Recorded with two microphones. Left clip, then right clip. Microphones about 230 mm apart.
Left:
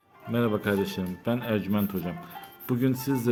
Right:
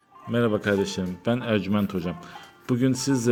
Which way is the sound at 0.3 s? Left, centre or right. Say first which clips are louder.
Right 3 dB; centre.